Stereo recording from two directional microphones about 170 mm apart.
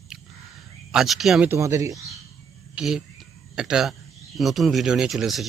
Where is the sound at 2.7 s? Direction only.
5° right (ahead or behind).